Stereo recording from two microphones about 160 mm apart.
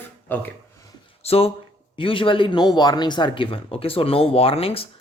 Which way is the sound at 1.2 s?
40° left (ahead or behind).